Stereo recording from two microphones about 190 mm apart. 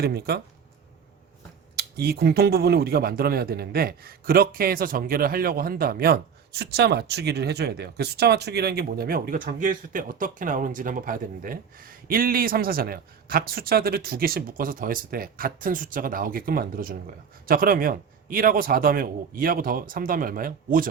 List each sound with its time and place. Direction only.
0.0 s speech: 55° right (ahead or behind)
1.7 s speech: 55° right (ahead or behind)